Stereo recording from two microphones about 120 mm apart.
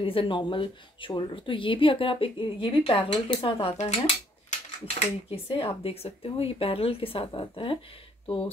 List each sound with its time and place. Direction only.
0.0 s speech: 50° left (ahead or behind)
4.5 s speech: 65° left (ahead or behind)
5.5 s speech: 50° left (ahead or behind)